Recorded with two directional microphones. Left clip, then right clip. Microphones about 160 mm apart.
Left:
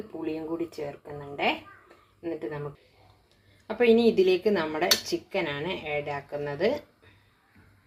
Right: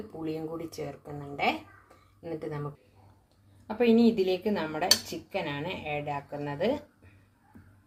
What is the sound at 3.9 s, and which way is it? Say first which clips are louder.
Cutlery: left 4 dB; 30° left (ahead or behind).